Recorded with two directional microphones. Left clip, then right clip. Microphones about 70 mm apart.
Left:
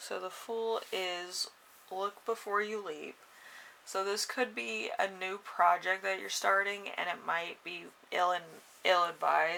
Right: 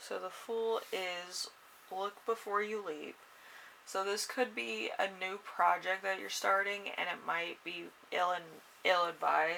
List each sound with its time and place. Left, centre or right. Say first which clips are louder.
0.0 s speech: left 2 dB; left